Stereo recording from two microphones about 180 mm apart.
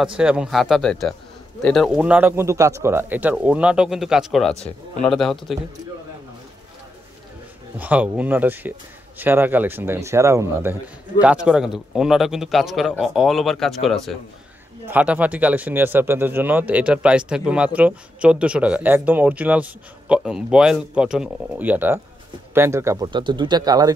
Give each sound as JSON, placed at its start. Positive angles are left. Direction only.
{"t": 0.2, "sound": "a man's voice", "side_deg": -5}
{"t": 7.8, "sound": "a man's voice", "side_deg": -10}